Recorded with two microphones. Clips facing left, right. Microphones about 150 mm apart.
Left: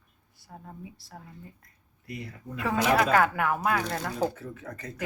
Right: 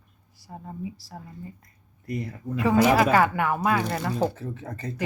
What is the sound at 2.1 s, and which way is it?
Speech, 45° right (ahead or behind).